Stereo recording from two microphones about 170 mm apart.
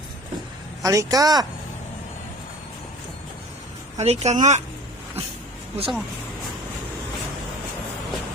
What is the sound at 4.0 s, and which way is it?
Speech, 40° right (ahead or behind).